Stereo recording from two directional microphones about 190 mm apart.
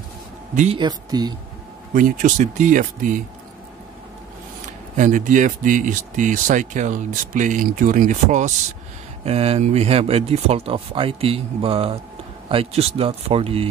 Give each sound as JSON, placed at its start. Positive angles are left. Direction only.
{"t": 0.7, "sound": "speech", "side_deg": -20}
{"t": 2.0, "sound": "speech", "side_deg": -45}
{"t": 4.9, "sound": "speech", "side_deg": -40}